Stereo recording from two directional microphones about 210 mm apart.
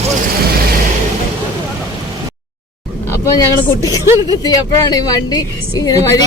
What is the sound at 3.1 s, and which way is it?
Speech, 15° left (ahead or behind).